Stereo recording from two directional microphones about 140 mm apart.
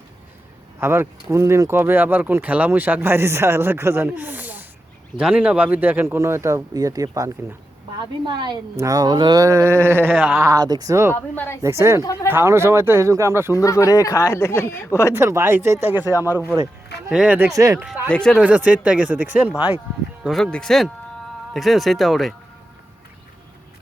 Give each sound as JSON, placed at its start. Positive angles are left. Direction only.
{"t": 0.8, "sound": "a woman's voice", "side_deg": -20}
{"t": 10.2, "sound": "speech", "side_deg": -5}
{"t": 10.4, "sound": "speech", "side_deg": -25}
{"t": 11.1, "sound": "a woman's voice", "side_deg": 15}
{"t": 11.6, "sound": "speech", "side_deg": -20}
{"t": 13.5, "sound": "speech", "side_deg": 20}
{"t": 15.1, "sound": "speech", "side_deg": -20}
{"t": 16.0, "sound": "speech", "side_deg": 25}
{"t": 17.1, "sound": "speech", "side_deg": -5}
{"t": 17.5, "sound": "speech", "side_deg": -25}
{"t": 17.7, "sound": "speech", "side_deg": -10}
{"t": 18.1, "sound": "speech", "side_deg": 5}
{"t": 18.3, "sound": "speech", "side_deg": -10}
{"t": 20.2, "sound": "speech", "side_deg": 5}